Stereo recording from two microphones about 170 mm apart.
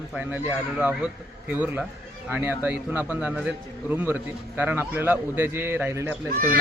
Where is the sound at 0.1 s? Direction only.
10° right (ahead or behind).